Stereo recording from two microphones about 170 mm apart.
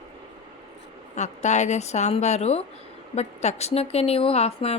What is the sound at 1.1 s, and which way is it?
Speech, 45° left (ahead or behind).